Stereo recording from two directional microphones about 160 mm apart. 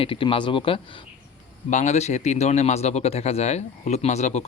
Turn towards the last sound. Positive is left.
turn(degrees=45)  # may be behind; listen again after turning